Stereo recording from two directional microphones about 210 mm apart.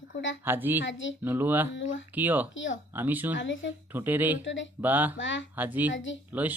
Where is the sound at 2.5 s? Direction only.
65° left (ahead or behind).